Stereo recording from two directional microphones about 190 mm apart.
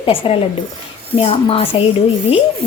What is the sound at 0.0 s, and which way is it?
A woman's voice, 30° left (ahead or behind).